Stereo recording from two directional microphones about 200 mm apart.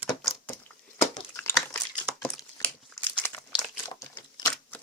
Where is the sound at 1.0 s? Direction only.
15° left (ahead or behind).